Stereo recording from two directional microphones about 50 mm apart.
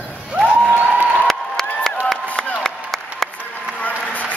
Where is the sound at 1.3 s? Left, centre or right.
Centre.